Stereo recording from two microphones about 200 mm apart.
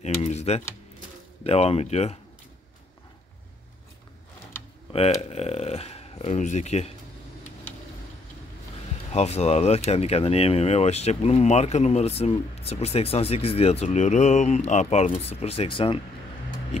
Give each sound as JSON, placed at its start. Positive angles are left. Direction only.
{"t": 0.0, "sound": "speech", "side_deg": 35}
{"t": 5.2, "sound": "speech", "side_deg": 30}
{"t": 9.1, "sound": "speech", "side_deg": 35}